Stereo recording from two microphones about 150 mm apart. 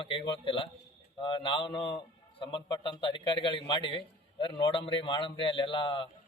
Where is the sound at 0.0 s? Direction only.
35° left (ahead or behind).